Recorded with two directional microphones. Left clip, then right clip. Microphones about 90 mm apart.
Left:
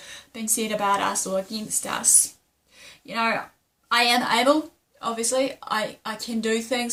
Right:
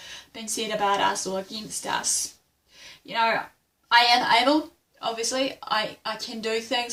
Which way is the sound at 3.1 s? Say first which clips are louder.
Right 1 dB; 35° left (ahead or behind).